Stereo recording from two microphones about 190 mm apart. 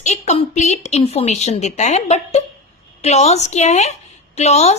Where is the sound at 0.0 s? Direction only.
35° left (ahead or behind).